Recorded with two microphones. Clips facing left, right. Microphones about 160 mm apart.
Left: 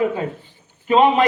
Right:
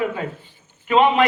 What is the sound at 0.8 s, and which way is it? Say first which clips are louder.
Speech: left 1 dB; 35° left (ahead or behind).